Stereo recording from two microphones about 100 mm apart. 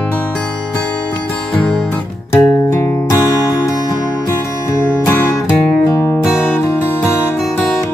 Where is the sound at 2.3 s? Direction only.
25° left (ahead or behind).